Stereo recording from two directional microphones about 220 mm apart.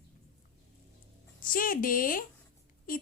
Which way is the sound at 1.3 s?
40° left (ahead or behind).